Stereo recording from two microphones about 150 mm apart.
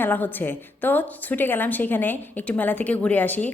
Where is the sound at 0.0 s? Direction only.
15° left (ahead or behind).